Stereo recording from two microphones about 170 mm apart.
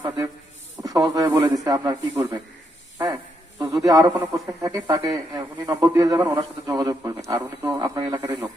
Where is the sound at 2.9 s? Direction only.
20° right (ahead or behind).